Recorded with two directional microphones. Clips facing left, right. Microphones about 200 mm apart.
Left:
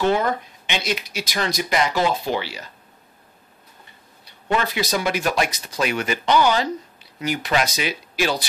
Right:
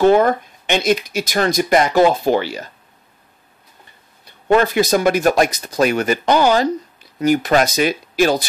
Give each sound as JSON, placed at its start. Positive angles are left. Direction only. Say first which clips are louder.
{"t": 0.0, "sound": "speech", "louder": "right 8 dB", "side_deg": -50}
{"t": 4.2, "sound": "speech", "louder": "right 8 dB", "side_deg": -50}